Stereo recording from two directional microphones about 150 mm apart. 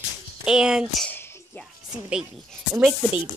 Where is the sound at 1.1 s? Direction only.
15° left (ahead or behind).